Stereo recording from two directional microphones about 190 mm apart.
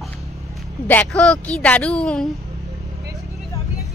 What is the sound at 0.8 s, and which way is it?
A woman's voice, 5° left (ahead or behind).